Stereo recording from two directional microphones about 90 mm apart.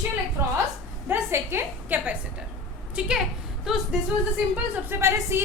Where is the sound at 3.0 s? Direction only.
10° right (ahead or behind).